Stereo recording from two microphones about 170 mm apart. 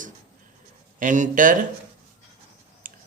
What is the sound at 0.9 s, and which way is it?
Speech, 50° right (ahead or behind).